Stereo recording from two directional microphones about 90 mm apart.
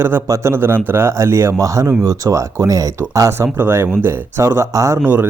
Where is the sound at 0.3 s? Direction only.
25° right (ahead or behind).